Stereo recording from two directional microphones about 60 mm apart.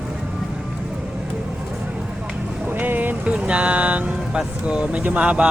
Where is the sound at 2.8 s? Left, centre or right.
Right.